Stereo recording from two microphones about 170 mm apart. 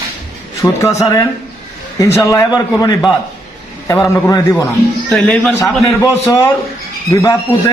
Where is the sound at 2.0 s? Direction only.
15° left (ahead or behind).